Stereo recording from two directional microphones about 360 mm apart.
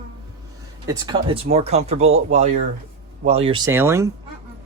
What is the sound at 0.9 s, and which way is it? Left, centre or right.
Speech, centre.